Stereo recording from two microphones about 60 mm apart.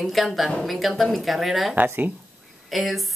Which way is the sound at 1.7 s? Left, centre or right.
Right.